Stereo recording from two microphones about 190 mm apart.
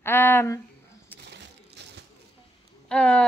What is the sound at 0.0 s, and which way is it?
Speech, 10° left (ahead or behind).